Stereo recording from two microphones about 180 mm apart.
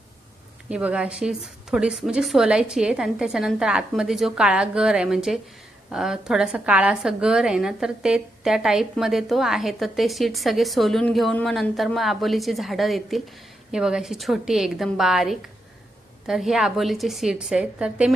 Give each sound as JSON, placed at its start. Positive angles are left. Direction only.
{"t": 0.7, "sound": "a woman's voice", "side_deg": -5}